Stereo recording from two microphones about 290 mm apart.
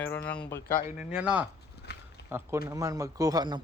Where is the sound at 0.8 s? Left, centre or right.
Centre.